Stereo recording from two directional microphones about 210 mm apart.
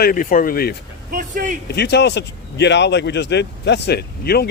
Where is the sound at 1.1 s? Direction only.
40° right (ahead or behind).